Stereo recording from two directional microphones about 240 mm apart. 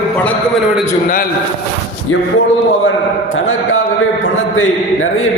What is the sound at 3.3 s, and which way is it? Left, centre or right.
A man's voice, left.